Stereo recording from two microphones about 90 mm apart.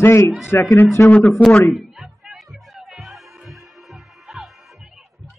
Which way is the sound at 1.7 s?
5° right (ahead or behind).